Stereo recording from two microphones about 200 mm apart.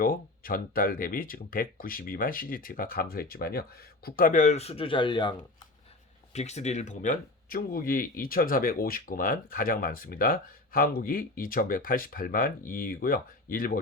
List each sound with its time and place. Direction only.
0.0 s speech: 45° left (ahead or behind); by 5.6 s 25° left (ahead or behind)
6.3 s speech: 35° left (ahead or behind)